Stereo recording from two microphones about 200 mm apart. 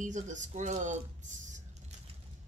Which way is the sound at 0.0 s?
40° right (ahead or behind).